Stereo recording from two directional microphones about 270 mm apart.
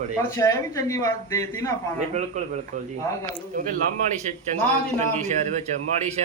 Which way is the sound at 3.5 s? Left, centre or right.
Right.